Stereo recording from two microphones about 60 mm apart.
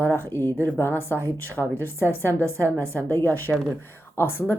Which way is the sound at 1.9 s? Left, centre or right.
Left.